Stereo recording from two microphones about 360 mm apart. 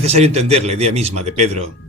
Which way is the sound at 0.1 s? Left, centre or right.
Centre.